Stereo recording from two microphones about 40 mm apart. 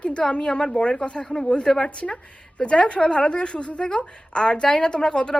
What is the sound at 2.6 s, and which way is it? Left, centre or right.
A woman's voice, left.